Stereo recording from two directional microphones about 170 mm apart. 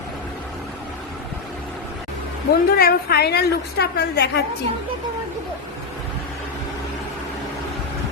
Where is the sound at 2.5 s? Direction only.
65° left (ahead or behind).